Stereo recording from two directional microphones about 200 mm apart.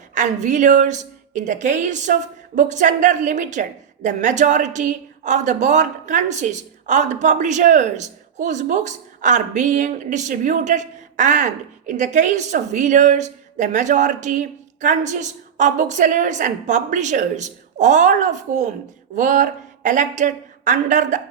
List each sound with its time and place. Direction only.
0.1 s a woman's voice: 40° right (ahead or behind)